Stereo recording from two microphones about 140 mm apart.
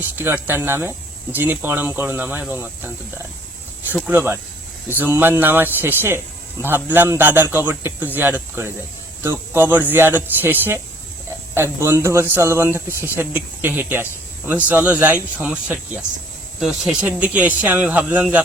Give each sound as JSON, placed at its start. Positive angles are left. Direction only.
{"t": 0.2, "sound": "speech", "side_deg": -15}
{"t": 4.1, "sound": "speech", "side_deg": -15}